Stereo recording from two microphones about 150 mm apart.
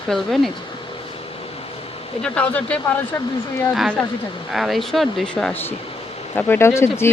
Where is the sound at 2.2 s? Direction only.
10° left (ahead or behind).